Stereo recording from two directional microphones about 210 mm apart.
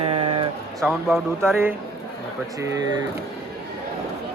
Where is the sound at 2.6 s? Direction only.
15° right (ahead or behind).